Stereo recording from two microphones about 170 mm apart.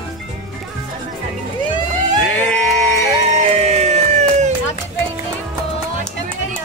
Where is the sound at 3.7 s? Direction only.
40° right (ahead or behind).